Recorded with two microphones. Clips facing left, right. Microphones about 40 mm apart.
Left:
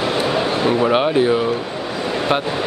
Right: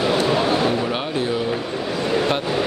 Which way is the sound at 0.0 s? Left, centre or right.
Centre.